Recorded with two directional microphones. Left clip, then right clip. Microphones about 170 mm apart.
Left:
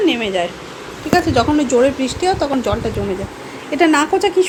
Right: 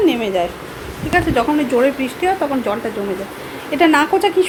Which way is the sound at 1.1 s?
15° left (ahead or behind).